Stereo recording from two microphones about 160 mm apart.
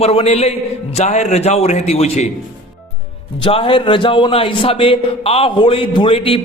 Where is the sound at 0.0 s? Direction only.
40° left (ahead or behind).